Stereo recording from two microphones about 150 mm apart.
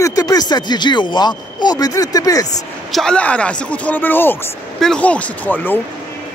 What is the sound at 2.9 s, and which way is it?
Speech, 5° left (ahead or behind).